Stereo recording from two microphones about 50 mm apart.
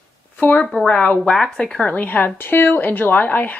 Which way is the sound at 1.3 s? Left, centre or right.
Centre.